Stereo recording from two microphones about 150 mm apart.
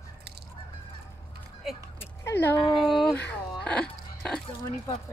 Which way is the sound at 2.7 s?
Centre (ahead or behind).